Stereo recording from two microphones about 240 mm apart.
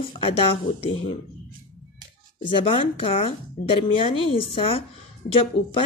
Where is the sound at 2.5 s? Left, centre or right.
Left.